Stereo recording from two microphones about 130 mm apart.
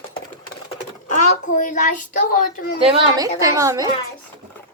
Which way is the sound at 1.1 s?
75° left (ahead or behind).